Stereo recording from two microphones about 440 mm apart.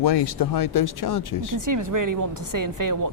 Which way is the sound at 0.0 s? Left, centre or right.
Left.